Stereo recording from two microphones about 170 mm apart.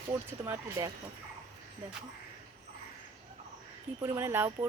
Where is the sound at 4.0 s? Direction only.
15° right (ahead or behind).